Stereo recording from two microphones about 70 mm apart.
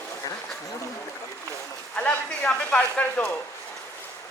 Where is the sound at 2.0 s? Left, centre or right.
Centre.